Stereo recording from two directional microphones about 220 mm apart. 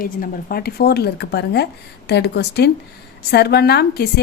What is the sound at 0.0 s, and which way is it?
A woman's voice, 40° left (ahead or behind).